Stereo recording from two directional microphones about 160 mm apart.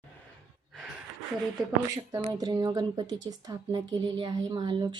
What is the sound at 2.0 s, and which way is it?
A woman's voice, 25° right (ahead or behind).